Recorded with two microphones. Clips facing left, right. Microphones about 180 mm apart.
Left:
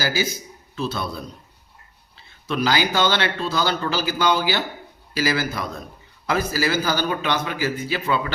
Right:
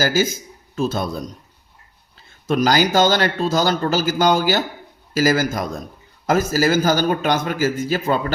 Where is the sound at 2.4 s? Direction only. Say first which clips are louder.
Right 5 dB; 45° right (ahead or behind).